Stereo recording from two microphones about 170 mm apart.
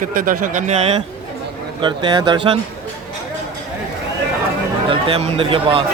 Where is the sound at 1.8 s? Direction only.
25° right (ahead or behind).